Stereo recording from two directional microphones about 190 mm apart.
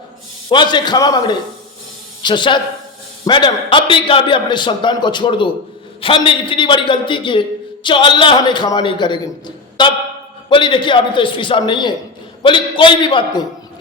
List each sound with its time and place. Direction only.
0.5 s a man's voice: 25° left (ahead or behind)